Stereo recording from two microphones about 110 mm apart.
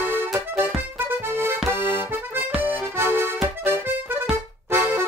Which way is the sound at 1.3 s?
20° right (ahead or behind).